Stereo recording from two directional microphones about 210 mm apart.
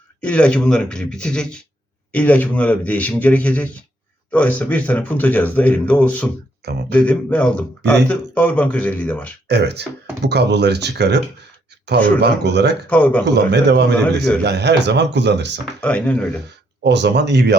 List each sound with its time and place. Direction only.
0.2 s a man's voice: 5° left (ahead or behind)
9.5 s a man's voice: 50° right (ahead or behind)
11.9 s a man's voice: 5° left (ahead or behind)
12.2 s a man's voice: 50° right (ahead or behind)
12.9 s a man's voice: 5° left (ahead or behind)
13.2 s a man's voice: 55° right (ahead or behind)
15.8 s a man's voice: 5° left (ahead or behind)
16.8 s speech: 55° right (ahead or behind)